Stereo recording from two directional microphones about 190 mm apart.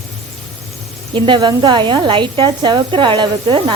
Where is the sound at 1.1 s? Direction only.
25° right (ahead or behind).